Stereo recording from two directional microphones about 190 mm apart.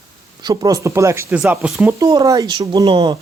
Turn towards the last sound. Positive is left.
turn(degrees=-25)  # may be behind; listen again after turning